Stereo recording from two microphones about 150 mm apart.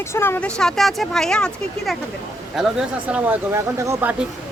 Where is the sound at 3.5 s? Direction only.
20° right (ahead or behind).